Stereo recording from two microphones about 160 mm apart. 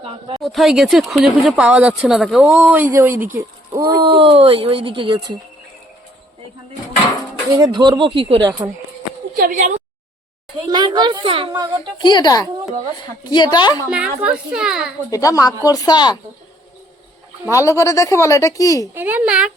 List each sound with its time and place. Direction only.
0.4 s speech: centre (ahead or behind)
2.7 s a woman's voice: 15° right (ahead or behind)
3.8 s speech: 30° right (ahead or behind)
7.6 s speech: 30° right (ahead or behind)
9.3 s a woman's voice: 55° right (ahead or behind)
10.7 s speech: 30° right (ahead or behind)
11.9 s a woman's voice: 30° left (ahead or behind)
13.9 s speech: 5° right (ahead or behind)
15.1 s a woman's voice: 20° left (ahead or behind)
17.5 s a woman's voice: 20° left (ahead or behind)
18.9 s a woman's voice: 10° right (ahead or behind)